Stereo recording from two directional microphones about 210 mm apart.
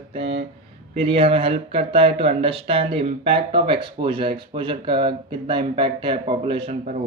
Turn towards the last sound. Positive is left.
turn(degrees=-25)  # may be behind; listen again after turning